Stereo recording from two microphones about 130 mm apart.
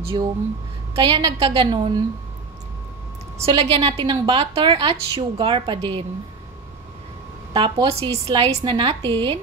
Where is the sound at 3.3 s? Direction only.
50° right (ahead or behind).